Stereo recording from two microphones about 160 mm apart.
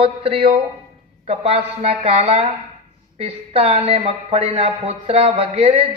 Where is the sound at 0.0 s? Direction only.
35° right (ahead or behind).